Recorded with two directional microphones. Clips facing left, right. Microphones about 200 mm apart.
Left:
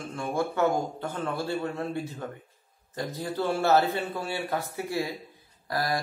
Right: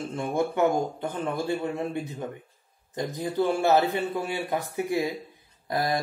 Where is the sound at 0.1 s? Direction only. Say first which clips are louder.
Right 2 dB; 20° right (ahead or behind).